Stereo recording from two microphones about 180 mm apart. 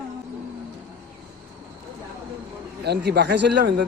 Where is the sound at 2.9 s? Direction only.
65° right (ahead or behind).